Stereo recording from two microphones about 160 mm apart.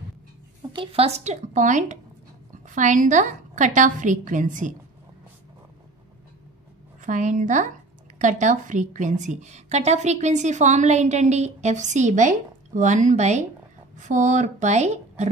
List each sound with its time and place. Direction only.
0.6 s a woman's voice: 35° right (ahead or behind); by 4.7 s 50° right (ahead or behind)
7.0 s a woman's voice: 50° right (ahead or behind)